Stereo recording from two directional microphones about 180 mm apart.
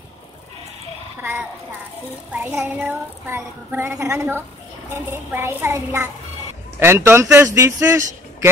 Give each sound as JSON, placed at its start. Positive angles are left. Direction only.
{"t": 2.5, "sound": "a woman's voice", "side_deg": -10}